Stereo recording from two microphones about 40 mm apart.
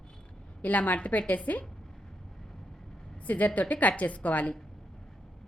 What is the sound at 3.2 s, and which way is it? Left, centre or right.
A woman's voice, left.